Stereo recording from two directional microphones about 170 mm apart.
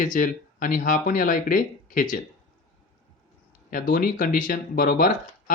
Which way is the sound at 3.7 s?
55° left (ahead or behind).